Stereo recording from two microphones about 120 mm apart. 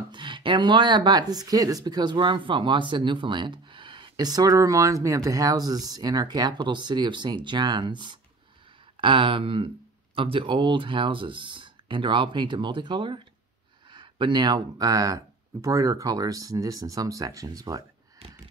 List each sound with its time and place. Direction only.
0.1 s speech: 40° right (ahead or behind)